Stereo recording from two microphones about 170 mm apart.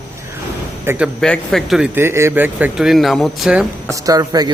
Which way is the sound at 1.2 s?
5° left (ahead or behind).